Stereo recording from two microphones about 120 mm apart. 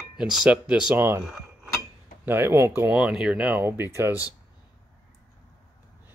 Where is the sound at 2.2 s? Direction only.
20° right (ahead or behind).